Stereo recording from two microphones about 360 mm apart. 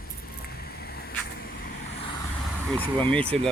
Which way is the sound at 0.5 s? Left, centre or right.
Left.